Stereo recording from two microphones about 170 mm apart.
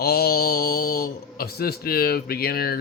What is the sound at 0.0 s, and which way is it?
Speech, 65° left (ahead or behind).